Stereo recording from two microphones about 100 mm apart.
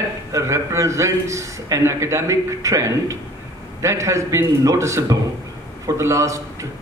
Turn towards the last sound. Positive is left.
turn(degrees=-30)  # may be behind; listen again after turning